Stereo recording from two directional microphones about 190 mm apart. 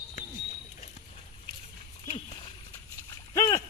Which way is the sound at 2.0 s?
30° left (ahead or behind).